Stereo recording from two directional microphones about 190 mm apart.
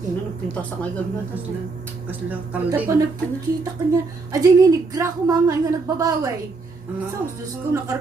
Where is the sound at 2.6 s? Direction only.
10° right (ahead or behind).